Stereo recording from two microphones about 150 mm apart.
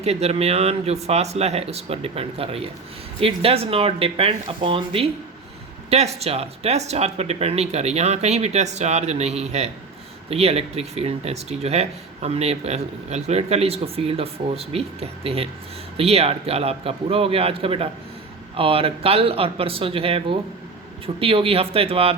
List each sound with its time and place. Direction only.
0.0 s a man's voice: 45° right (ahead or behind)